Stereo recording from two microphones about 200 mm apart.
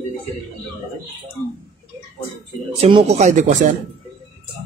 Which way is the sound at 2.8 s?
30° right (ahead or behind).